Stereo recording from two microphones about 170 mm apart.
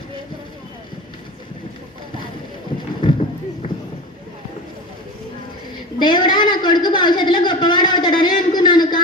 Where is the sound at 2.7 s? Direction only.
30° left (ahead or behind).